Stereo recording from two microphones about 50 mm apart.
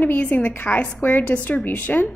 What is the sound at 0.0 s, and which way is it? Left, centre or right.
Speech, left.